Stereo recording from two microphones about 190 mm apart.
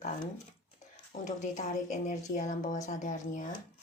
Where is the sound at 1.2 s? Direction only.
40° left (ahead or behind).